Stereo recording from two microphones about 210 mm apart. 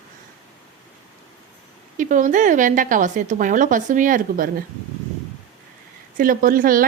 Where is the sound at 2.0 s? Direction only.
40° right (ahead or behind).